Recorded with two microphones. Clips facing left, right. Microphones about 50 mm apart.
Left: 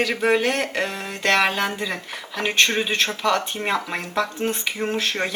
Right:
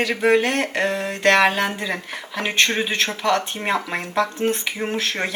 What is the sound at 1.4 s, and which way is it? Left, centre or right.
Speech, centre.